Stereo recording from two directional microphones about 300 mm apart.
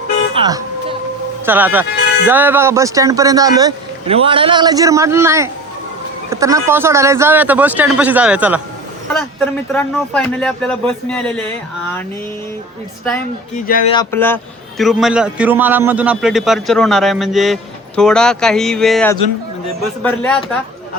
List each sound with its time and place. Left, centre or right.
0.3 s music: centre
1.5 s a man's voice: centre
13.7 s speech: left
13.9 s a man's voice: centre